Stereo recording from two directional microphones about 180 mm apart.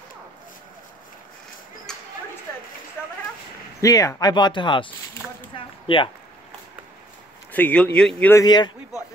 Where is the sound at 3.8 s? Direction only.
20° left (ahead or behind).